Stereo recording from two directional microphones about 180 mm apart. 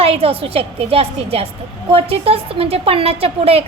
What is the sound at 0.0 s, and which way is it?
A woman's voice, 35° right (ahead or behind).